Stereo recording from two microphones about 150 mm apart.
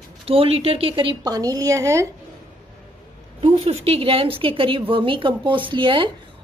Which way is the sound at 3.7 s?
40° right (ahead or behind).